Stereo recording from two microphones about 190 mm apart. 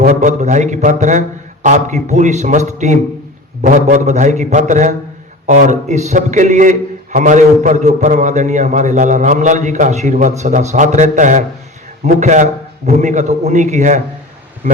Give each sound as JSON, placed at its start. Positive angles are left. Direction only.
{"t": 0.1, "sound": "a man's voice", "side_deg": -40}